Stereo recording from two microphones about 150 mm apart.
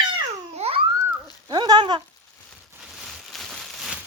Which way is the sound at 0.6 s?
40° right (ahead or behind).